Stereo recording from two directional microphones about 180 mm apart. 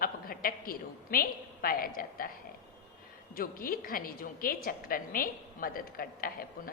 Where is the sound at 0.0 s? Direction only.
55° left (ahead or behind).